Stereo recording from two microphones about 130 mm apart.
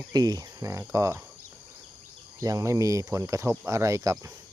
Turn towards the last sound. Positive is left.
turn(degrees=-25)  # may be behind; listen again after turning